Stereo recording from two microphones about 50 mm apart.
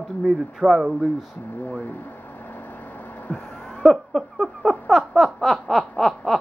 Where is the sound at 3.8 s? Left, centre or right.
Centre.